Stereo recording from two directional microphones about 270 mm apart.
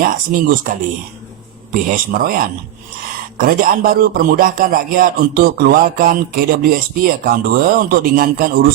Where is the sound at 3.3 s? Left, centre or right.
Right.